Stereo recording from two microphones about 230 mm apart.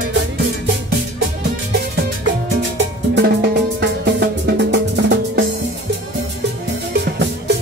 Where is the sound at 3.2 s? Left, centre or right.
Right.